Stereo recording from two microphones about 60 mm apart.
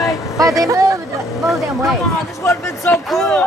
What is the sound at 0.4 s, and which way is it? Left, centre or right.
Speech, right.